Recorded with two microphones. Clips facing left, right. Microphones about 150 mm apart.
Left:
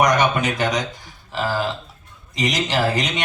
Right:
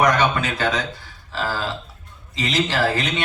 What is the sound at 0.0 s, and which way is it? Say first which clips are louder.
A man's voice: left 1 dB; 15° left (ahead or behind).